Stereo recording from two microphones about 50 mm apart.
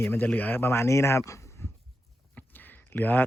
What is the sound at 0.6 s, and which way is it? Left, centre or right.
Speech, left.